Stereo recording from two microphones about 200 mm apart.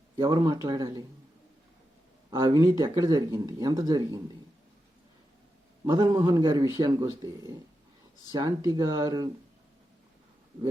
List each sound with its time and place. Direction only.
0.2 s speech: 20° right (ahead or behind)
2.3 s speech: 20° right (ahead or behind)
5.8 s speech: 20° right (ahead or behind)